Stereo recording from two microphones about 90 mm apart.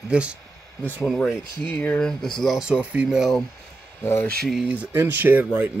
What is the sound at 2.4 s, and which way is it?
Speech, centre (ahead or behind).